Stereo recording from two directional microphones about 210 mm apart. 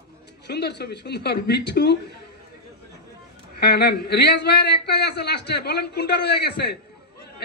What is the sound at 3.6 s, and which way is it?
A man's voice, 50° left (ahead or behind).